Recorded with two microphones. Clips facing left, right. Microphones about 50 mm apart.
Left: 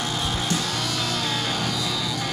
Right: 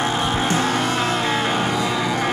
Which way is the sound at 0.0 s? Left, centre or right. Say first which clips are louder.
Right 7 dB; right.